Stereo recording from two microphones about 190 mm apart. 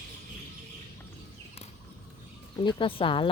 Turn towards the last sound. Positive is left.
turn(degrees=25)  # may be behind; listen again after turning